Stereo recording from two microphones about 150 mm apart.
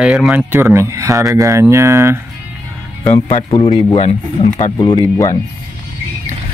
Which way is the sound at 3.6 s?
45° left (ahead or behind).